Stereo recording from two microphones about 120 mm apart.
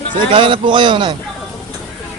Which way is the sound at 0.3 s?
45° right (ahead or behind).